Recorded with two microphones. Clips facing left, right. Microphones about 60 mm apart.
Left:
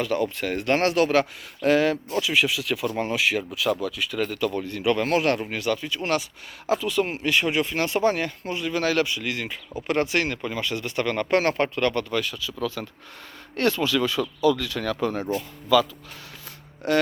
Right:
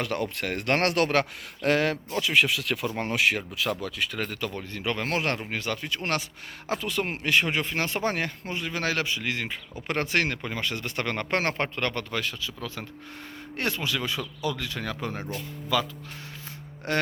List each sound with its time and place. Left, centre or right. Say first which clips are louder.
0.0 s speech: left 4 dB; right
13.6 s speech: left 7 dB; right
16.8 s speech: left 6 dB; right